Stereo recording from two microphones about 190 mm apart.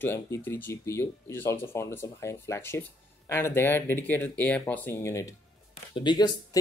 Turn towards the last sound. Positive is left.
turn(degrees=20)  # may be behind; listen again after turning